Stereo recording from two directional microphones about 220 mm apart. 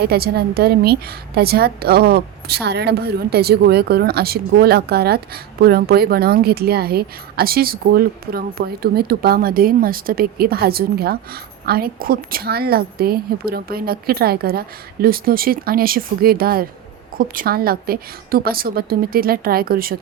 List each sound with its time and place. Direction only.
0.0 s a woman's voice: 45° right (ahead or behind)